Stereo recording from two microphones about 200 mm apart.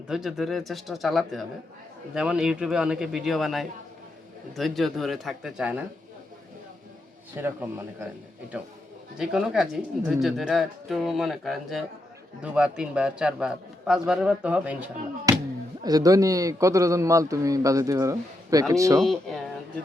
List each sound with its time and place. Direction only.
0.1 s speech: centre (ahead or behind)
7.3 s a man's voice: 10° right (ahead or behind)
9.1 s speech: 5° right (ahead or behind)
15.3 s a sound: 15° right (ahead or behind)
15.8 s a man's voice: 20° right (ahead or behind)
18.9 s speech: centre (ahead or behind)